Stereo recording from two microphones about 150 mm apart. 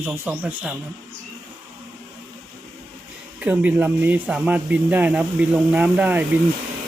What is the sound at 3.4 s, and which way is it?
Speech, 10° right (ahead or behind).